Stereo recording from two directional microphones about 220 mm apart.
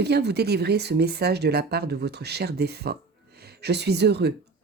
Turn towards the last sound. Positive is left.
turn(degrees=-50)  # may be behind; listen again after turning